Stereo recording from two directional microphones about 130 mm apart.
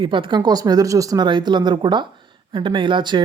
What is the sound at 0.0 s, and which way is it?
Speech, 40° right (ahead or behind).